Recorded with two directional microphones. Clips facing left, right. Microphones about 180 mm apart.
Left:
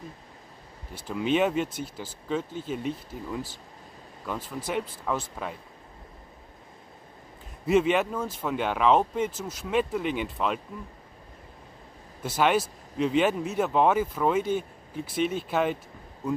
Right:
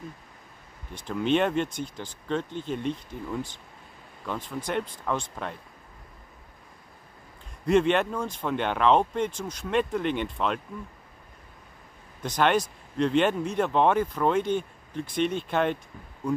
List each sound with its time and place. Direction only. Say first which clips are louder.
0.9 s speech: right 1 dB; 5° left (ahead or behind)
7.6 s speech: right 1 dB; 5° left (ahead or behind)
12.2 s speech: even; 5° left (ahead or behind)